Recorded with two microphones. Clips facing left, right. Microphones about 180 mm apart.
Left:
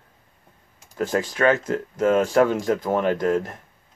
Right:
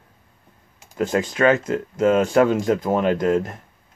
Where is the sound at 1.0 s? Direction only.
15° right (ahead or behind).